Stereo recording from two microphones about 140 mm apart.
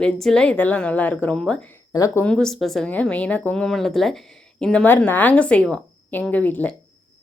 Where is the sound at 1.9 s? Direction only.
25° left (ahead or behind).